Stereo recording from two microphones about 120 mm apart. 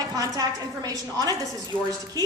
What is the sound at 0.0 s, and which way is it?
A woman's voice, 30° right (ahead or behind).